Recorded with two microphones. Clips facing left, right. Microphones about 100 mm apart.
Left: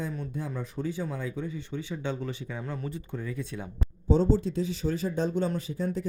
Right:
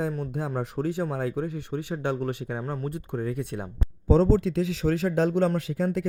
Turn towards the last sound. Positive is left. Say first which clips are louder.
# right 4 dB
turn(degrees=-90)